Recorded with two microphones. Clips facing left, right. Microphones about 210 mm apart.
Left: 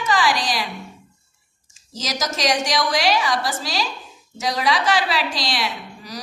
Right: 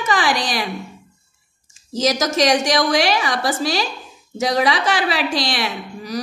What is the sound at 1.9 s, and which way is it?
A woman's voice, 55° right (ahead or behind).